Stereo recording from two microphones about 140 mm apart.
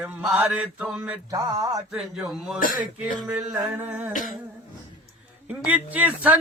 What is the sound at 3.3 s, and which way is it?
Mantra, 10° right (ahead or behind).